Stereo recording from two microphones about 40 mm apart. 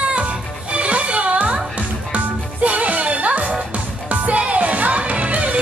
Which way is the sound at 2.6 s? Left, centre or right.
Right.